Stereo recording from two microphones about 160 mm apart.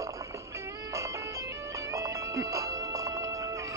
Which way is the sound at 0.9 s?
20° right (ahead or behind).